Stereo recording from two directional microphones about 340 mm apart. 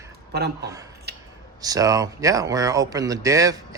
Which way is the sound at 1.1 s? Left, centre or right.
Right.